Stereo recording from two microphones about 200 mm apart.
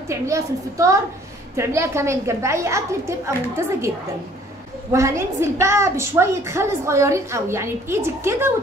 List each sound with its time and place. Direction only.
0.1 s a woman's voice: 15° right (ahead or behind)
4.9 s a woman's voice: 15° right (ahead or behind)